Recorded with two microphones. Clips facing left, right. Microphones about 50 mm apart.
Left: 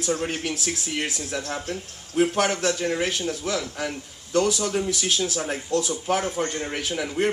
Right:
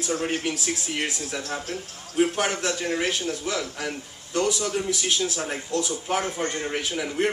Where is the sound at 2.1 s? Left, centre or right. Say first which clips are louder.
Left 2 dB; centre.